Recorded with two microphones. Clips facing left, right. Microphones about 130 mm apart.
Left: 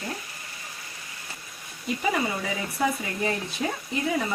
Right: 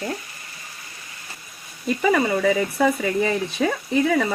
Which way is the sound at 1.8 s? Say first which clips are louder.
Right 7 dB; 70° right (ahead or behind).